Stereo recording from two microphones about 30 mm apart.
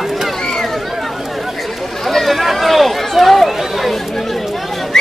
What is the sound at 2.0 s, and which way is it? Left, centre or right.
Run, centre.